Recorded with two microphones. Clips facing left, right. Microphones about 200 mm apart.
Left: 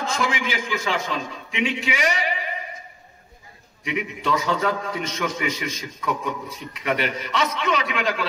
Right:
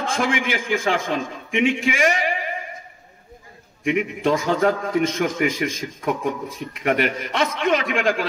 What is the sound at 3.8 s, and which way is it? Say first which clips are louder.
A man's voice: right 6 dB; 50° right (ahead or behind).